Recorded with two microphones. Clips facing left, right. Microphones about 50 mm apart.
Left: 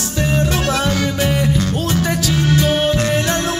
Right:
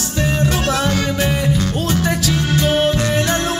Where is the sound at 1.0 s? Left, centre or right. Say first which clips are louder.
Left 1 dB; centre.